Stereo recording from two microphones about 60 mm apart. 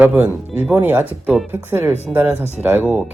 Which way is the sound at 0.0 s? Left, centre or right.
Right.